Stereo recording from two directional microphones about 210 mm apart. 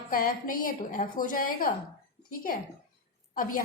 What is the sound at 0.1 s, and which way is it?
A woman's voice, 40° left (ahead or behind).